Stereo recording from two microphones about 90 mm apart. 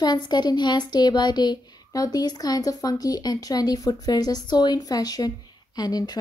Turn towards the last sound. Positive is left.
turn(degrees=45)  # may be behind; listen again after turning